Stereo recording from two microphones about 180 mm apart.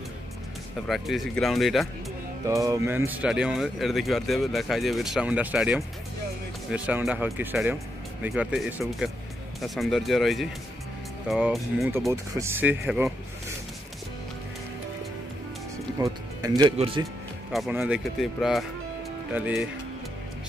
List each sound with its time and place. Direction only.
0.8 s speech: centre (ahead or behind)
2.4 s speech: 20° right (ahead or behind)
12.1 s speech: 15° right (ahead or behind)
16.0 s speech: 20° right (ahead or behind)
16.7 s speech: 30° right (ahead or behind)
17.5 s speech: centre (ahead or behind)